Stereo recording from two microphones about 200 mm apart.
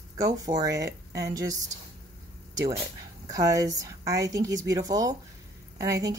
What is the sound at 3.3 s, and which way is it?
A woman's voice, 20° right (ahead or behind).